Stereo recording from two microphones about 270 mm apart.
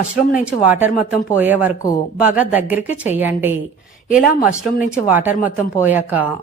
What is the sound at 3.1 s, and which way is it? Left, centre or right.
Speech, centre.